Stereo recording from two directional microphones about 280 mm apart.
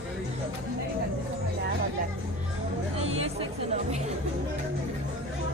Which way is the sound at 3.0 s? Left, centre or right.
Right.